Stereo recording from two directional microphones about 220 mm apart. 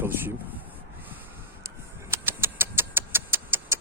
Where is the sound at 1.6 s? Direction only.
10° right (ahead or behind).